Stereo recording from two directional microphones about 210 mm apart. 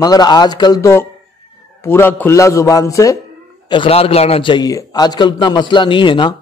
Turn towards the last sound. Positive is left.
turn(degrees=25)  # may be behind; listen again after turning